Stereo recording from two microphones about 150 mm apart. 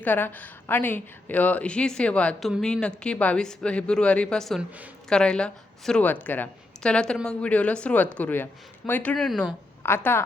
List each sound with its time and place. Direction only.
0.0 s a woman's voice: 10° left (ahead or behind)
9.8 s a woman's voice: 15° left (ahead or behind)